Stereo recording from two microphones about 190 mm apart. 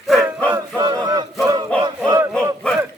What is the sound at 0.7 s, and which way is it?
Chant, 20° right (ahead or behind).